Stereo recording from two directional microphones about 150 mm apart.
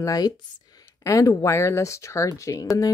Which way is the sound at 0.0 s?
25° left (ahead or behind).